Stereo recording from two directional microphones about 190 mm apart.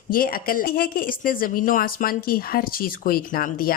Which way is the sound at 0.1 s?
50° left (ahead or behind).